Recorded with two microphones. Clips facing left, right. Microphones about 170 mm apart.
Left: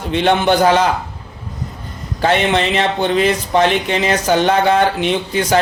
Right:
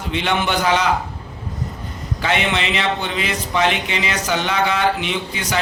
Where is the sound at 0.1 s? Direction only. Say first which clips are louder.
Left 7 dB; 40° left (ahead or behind).